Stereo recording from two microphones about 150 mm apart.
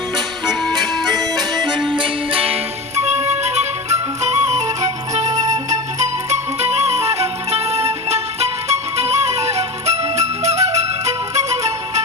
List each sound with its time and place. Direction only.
0.4 s music: centre (ahead or behind)
2.0 s music: 40° right (ahead or behind)